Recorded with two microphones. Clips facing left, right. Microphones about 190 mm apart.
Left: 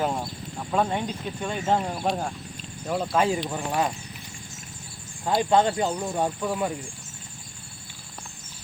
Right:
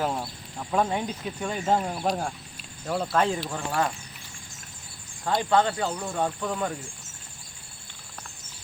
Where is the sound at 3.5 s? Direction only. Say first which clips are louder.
Left 1 dB; 15° left (ahead or behind).